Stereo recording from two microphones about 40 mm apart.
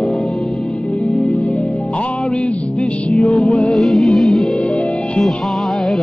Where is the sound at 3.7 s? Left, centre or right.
Centre.